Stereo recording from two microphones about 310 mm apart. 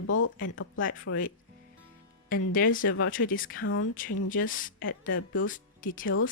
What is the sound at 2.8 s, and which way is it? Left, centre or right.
Speech, left.